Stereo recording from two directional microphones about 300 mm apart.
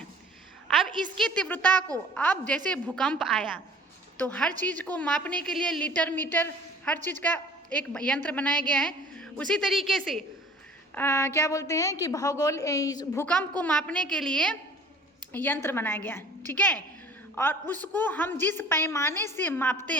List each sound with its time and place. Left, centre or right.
1.2 s a woman's voice: centre